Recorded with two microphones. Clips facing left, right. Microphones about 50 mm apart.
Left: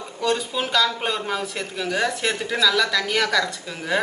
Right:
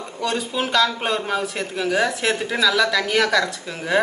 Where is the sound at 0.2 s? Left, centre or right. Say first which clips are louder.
Even; centre.